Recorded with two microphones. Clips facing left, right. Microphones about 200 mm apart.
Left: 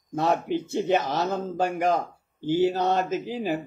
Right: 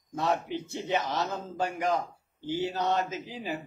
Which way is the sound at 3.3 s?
60° left (ahead or behind).